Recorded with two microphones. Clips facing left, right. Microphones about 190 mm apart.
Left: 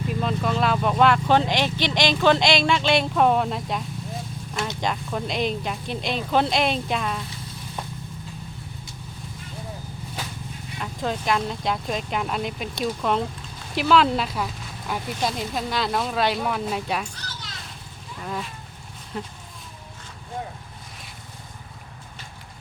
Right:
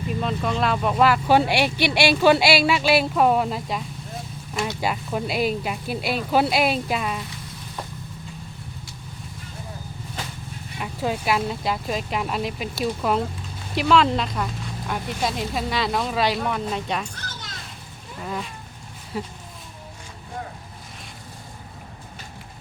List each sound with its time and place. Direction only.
0.1 s speech: centre (ahead or behind)
10.8 s speech: 10° right (ahead or behind)
17.2 s children playing: 50° right (ahead or behind)
18.2 s a sound: centre (ahead or behind)
19.1 s speech: 5° right (ahead or behind)